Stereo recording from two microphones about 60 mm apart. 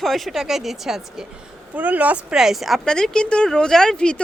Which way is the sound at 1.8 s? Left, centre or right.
Right.